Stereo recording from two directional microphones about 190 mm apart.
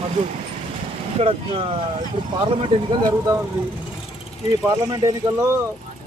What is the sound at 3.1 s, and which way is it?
Speech, 20° right (ahead or behind).